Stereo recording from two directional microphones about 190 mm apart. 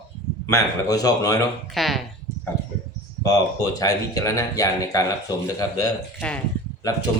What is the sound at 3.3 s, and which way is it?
Speech, 20° left (ahead or behind).